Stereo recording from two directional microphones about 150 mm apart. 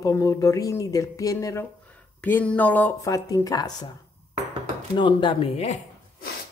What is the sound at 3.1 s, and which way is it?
Speech, 25° left (ahead or behind).